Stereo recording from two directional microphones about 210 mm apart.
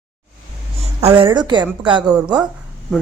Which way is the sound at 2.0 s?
5° right (ahead or behind).